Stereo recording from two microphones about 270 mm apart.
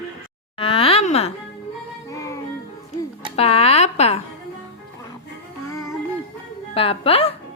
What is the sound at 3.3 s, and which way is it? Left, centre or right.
Speech, left.